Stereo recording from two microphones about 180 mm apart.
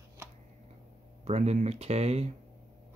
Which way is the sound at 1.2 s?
35° right (ahead or behind).